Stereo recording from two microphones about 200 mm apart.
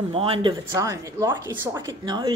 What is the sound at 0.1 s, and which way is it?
Speech, 25° right (ahead or behind).